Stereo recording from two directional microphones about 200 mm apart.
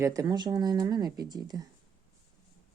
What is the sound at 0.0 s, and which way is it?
Speech, 15° right (ahead or behind).